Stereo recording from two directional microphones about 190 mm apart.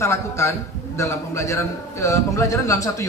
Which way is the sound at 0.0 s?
15° left (ahead or behind).